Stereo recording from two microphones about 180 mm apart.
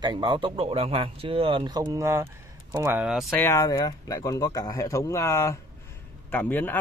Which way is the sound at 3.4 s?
15° left (ahead or behind).